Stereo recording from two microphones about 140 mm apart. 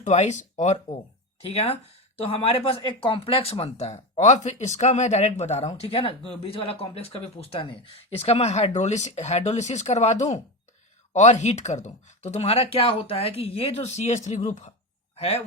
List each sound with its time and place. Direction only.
0.0 s speech: 55° left (ahead or behind)
15.1 s speech: 45° left (ahead or behind)